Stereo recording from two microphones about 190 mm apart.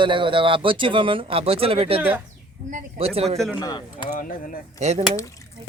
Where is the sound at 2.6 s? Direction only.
40° right (ahead or behind).